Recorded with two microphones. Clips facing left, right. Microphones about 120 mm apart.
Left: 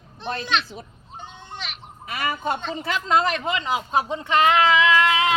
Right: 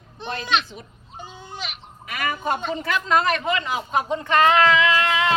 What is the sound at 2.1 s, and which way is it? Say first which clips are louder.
A woman's voice: right 1 dB; 30° left (ahead or behind).